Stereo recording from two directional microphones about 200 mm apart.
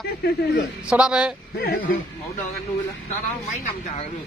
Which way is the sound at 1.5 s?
50° left (ahead or behind).